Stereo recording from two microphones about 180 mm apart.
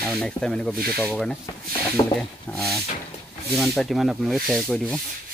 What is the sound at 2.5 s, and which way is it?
Rub, centre (ahead or behind).